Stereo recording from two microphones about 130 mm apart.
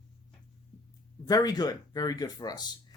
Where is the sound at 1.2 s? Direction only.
30° left (ahead or behind).